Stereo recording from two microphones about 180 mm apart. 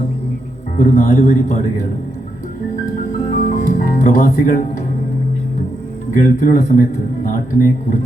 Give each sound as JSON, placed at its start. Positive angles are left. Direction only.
{"t": 0.8, "sound": "a man's voice", "side_deg": 40}
{"t": 3.2, "sound": "music", "side_deg": 50}
{"t": 6.1, "sound": "a man's voice", "side_deg": 50}